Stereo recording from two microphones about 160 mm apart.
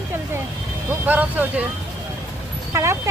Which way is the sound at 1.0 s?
10° right (ahead or behind).